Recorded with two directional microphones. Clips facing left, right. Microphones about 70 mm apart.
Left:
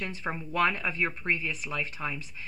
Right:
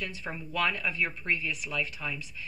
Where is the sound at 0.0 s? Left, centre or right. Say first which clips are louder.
Left 3 dB; left.